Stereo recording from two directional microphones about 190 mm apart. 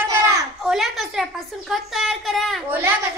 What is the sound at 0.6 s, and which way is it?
A woman's voice, centre (ahead or behind).